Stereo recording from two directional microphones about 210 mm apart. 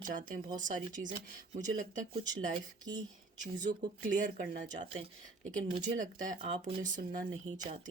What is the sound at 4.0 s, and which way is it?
Speech, 40° right (ahead or behind).